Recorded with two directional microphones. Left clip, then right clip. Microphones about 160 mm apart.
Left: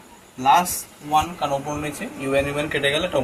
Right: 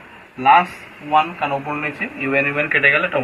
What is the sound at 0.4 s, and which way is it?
Speech, 35° left (ahead or behind).